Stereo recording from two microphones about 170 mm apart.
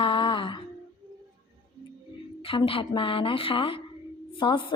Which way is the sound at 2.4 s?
30° left (ahead or behind).